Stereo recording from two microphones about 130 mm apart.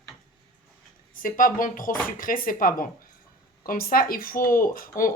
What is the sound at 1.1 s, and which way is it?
Speech, 90° left.